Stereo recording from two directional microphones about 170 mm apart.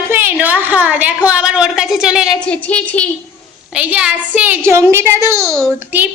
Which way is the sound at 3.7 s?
5° right (ahead or behind).